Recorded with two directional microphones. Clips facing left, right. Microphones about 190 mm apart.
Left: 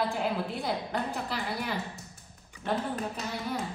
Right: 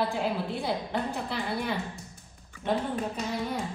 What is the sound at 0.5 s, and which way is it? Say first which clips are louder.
A woman's voice: right 2 dB; centre (ahead or behind).